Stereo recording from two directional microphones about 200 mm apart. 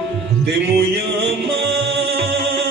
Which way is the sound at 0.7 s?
60° right (ahead or behind).